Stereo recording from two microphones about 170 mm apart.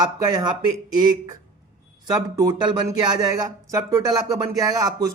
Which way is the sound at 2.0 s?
20° right (ahead or behind).